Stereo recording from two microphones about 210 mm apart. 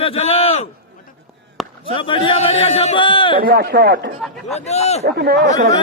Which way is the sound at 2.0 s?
25° left (ahead or behind).